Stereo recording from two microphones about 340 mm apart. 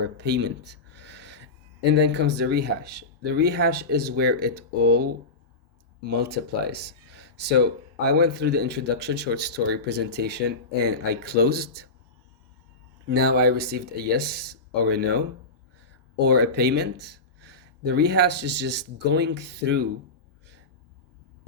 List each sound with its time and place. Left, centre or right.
0.0 s speech: right
13.1 s speech: right
16.2 s speech: right